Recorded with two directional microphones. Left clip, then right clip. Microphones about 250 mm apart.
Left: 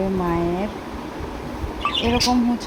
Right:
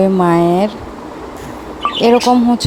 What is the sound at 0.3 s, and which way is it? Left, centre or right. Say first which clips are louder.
Speech: right 11 dB; right.